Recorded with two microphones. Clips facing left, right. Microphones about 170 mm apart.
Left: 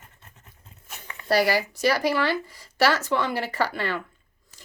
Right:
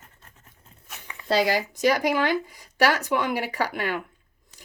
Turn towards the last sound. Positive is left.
turn(degrees=-15)  # may be behind; listen again after turning